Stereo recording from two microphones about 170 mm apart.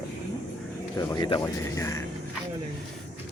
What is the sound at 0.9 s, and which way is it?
Speech, 25° left (ahead or behind).